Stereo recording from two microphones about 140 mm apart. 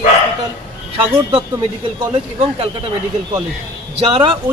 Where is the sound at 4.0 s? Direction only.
40° right (ahead or behind).